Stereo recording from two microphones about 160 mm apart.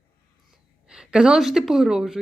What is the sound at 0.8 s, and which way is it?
A woman's voice, 5° right (ahead or behind).